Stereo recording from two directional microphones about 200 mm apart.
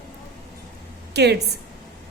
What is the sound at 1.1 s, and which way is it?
Speech, 55° right (ahead or behind).